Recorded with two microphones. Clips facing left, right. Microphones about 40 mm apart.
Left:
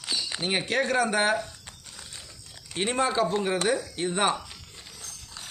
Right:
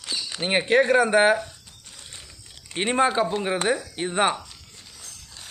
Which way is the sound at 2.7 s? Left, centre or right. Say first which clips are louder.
Right 4 dB; right.